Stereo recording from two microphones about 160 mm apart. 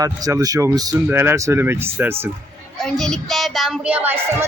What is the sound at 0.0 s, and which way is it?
Speech, 20° right (ahead or behind).